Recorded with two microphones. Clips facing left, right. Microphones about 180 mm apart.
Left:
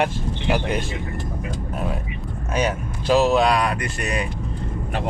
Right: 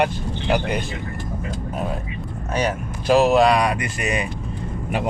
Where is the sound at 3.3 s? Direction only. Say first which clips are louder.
Right 3 dB; centre (ahead or behind).